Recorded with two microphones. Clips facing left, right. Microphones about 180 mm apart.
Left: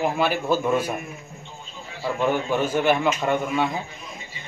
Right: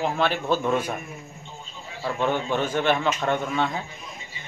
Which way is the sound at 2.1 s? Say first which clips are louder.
Left 2 dB; 10° left (ahead or behind).